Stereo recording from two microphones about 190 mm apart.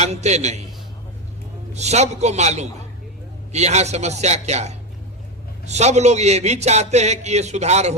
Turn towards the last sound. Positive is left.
turn(degrees=-35)  # may be behind; listen again after turning